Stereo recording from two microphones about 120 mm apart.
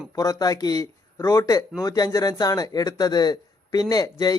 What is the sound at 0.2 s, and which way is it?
Speech, 30° left (ahead or behind).